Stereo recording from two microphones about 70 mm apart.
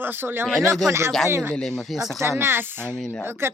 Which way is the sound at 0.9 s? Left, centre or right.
Right.